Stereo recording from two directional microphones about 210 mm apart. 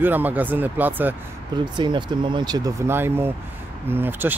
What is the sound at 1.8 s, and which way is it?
Speech, 20° right (ahead or behind).